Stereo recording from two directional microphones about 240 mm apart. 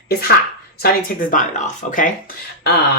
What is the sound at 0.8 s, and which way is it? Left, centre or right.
Speech, left.